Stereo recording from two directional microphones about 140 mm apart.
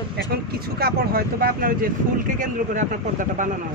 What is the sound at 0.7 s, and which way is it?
Speech, 90° right.